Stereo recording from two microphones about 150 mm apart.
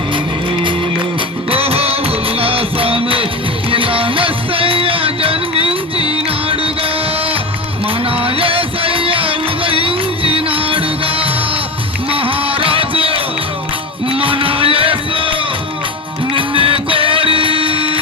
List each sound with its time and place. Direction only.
1.5 s music: 40° right (ahead or behind)
8.2 s music: 40° right (ahead or behind)